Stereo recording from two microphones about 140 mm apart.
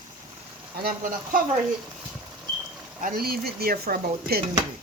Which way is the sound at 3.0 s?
90° right.